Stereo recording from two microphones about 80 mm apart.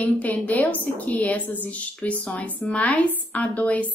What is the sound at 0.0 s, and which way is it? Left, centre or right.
A woman's voice, left.